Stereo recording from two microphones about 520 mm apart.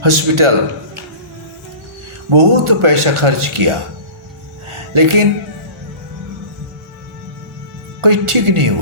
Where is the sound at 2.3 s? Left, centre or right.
Right.